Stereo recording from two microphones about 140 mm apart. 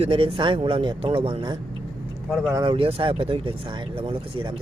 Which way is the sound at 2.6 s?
40° right (ahead or behind).